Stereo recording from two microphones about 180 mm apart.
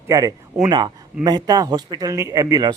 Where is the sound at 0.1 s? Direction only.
20° right (ahead or behind).